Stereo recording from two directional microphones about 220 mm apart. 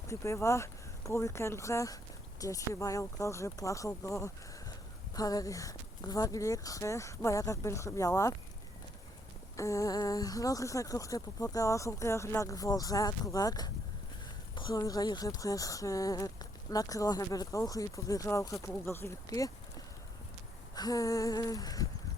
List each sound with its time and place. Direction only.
0.1 s speech: 15° left (ahead or behind)
9.6 s speech: 15° left (ahead or behind)
20.7 s speech: 15° left (ahead or behind)